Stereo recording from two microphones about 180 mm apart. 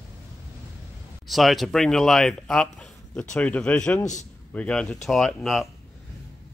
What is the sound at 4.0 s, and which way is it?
Speech, 40° left (ahead or behind).